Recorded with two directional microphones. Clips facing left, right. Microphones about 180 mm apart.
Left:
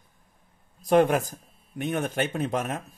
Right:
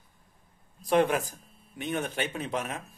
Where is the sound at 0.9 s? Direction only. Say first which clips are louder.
Left 4 dB; 45° left (ahead or behind).